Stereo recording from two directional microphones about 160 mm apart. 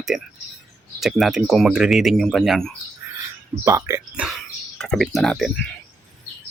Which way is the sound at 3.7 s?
15° right (ahead or behind).